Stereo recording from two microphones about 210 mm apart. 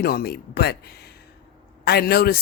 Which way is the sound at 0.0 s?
45° left (ahead or behind).